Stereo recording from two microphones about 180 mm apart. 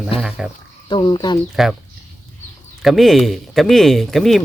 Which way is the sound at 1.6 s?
Centre (ahead or behind).